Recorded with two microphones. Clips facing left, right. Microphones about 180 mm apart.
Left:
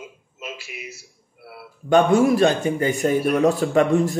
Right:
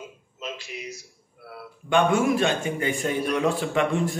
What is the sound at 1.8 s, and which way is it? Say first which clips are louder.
A man's voice: left 5 dB; 40° left (ahead or behind).